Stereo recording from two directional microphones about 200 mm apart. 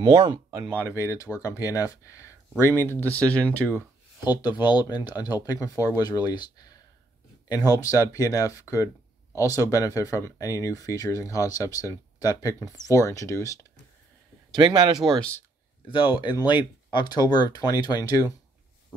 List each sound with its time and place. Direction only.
0.2 s speech: 15° right (ahead or behind)
0.9 s speech: 15° left (ahead or behind)
4.4 s speech: 20° left (ahead or behind)
14.6 s speech: 20° right (ahead or behind)
15.0 s speech: 5° left (ahead or behind)
15.9 s speech: 25° left (ahead or behind)